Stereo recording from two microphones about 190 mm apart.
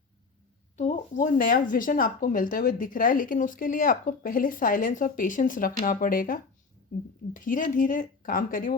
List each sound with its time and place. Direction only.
0.8 s speech: 40° left (ahead or behind)